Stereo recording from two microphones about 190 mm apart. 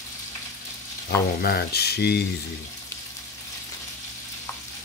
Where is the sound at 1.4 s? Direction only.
55° left (ahead or behind).